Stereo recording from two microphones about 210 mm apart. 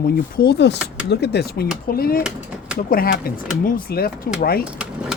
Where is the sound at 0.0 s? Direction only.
45° left (ahead or behind).